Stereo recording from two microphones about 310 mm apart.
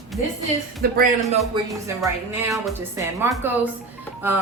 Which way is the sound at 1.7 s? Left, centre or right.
Centre.